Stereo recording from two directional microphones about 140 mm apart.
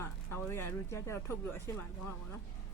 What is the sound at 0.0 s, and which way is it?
Speech, 15° left (ahead or behind).